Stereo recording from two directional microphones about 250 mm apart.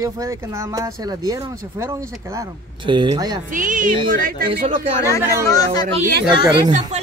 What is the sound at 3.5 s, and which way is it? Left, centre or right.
Speech, right.